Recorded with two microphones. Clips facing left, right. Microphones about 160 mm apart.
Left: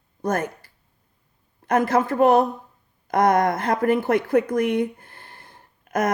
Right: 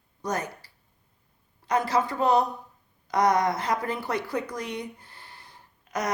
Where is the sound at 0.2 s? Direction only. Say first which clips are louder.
Left 6 dB; 50° left (ahead or behind).